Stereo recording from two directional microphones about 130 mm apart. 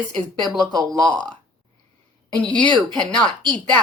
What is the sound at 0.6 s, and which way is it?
Speech, 30° right (ahead or behind).